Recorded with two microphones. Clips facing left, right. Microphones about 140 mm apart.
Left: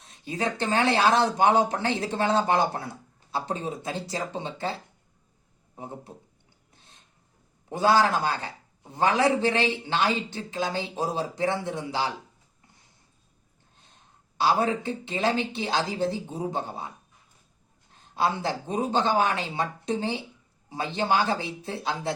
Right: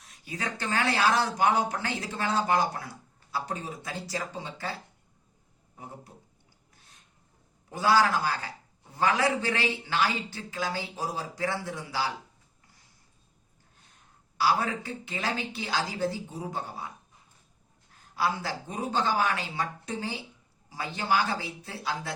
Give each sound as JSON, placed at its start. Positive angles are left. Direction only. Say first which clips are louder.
{"t": 0.0, "sound": "a man's voice", "louder": "left 7 dB", "side_deg": 25}
{"t": 6.7, "sound": "a sound", "louder": "left 3 dB", "side_deg": 25}
{"t": 7.7, "sound": "a man's voice", "louder": "left 2 dB", "side_deg": 25}
{"t": 14.3, "sound": "a man's voice", "louder": "left 3 dB", "side_deg": 25}
{"t": 17.9, "sound": "a man's voice", "louder": "left 3 dB", "side_deg": 25}